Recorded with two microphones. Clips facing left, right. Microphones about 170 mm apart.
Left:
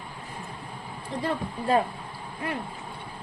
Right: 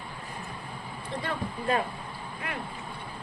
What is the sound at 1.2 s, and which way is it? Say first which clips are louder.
Speech: left 4 dB; 30° left (ahead or behind).